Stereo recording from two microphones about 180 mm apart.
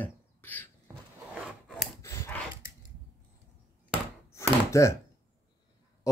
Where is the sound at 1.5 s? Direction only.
5° right (ahead or behind).